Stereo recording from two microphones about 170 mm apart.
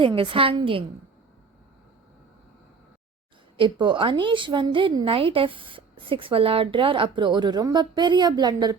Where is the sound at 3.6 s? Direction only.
30° right (ahead or behind).